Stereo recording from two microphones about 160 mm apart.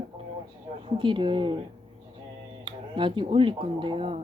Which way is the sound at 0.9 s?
30° right (ahead or behind).